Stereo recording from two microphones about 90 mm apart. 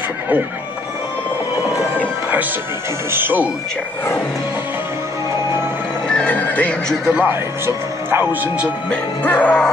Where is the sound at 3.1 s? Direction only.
25° right (ahead or behind).